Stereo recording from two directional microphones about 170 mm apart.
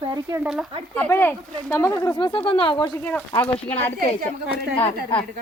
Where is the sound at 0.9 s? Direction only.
10° left (ahead or behind).